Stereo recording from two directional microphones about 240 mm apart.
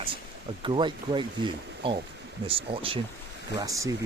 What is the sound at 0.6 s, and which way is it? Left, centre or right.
Speech, centre.